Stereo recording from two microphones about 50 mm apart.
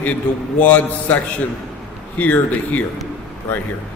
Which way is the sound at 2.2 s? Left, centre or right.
Left.